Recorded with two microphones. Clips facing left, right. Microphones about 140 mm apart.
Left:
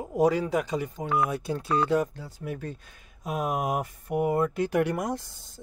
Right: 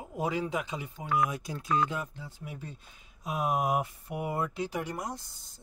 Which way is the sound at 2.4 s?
65° left (ahead or behind).